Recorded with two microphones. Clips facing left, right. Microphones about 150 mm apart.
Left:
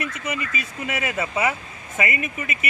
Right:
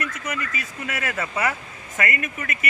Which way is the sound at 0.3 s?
20° left (ahead or behind).